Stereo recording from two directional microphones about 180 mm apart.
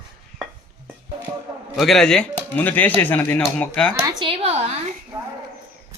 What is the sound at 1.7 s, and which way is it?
Speech, centre (ahead or behind).